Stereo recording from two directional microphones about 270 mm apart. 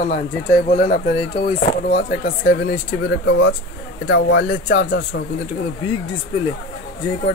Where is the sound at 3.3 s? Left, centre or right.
Left.